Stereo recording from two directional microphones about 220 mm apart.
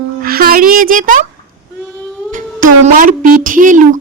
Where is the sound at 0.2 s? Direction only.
40° right (ahead or behind).